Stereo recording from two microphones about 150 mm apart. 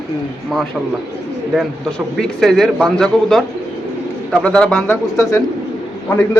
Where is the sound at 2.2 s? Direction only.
5° left (ahead or behind).